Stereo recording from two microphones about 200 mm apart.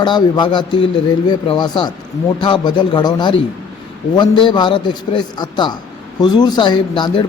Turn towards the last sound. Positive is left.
turn(degrees=25)  # may be behind; listen again after turning